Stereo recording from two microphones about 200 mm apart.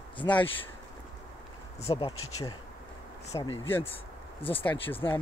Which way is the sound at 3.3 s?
15° left (ahead or behind).